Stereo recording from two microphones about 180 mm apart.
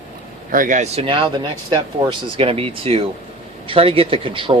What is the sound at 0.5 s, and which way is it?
Speech, 45° right (ahead or behind).